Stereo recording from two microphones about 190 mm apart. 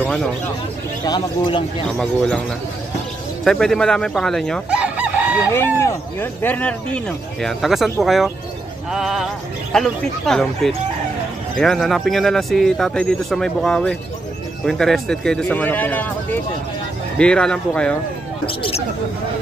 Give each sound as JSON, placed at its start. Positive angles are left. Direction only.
{"t": 0.0, "sound": "a sound", "side_deg": 0}
{"t": 1.0, "sound": "speech", "side_deg": 20}
{"t": 2.0, "sound": "speech", "side_deg": 5}
{"t": 3.4, "sound": "chicken", "side_deg": 5}
{"t": 5.8, "sound": "speech", "side_deg": 15}
{"t": 18.5, "sound": "speech", "side_deg": 30}